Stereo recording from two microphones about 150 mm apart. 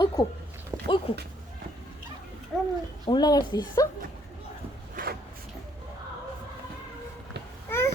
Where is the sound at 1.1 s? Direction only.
40° left (ahead or behind).